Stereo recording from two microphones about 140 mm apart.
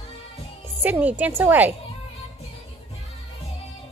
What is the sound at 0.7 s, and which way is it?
A woman's voice, 10° right (ahead or behind).